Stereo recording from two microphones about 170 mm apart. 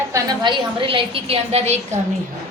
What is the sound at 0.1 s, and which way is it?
A woman's voice, 25° right (ahead or behind).